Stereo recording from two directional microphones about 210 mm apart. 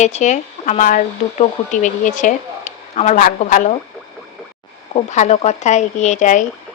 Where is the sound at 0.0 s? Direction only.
35° left (ahead or behind).